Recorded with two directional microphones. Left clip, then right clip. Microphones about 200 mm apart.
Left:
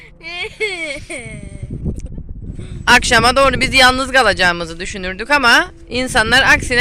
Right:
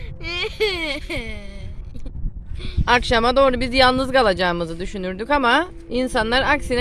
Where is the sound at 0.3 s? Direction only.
50° right (ahead or behind); by 1.5 s 70° right (ahead or behind).